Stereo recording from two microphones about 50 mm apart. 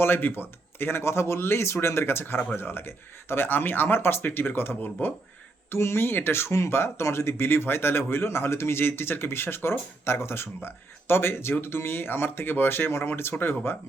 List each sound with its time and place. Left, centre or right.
0.0 s speech: left
5.7 s speech: left